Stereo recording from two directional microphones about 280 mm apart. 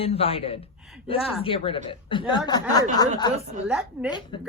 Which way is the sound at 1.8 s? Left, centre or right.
Centre.